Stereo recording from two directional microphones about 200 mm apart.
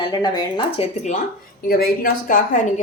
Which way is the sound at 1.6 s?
50° left (ahead or behind).